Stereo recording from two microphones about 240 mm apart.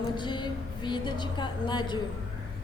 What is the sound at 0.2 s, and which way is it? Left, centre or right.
A woman's voice, centre.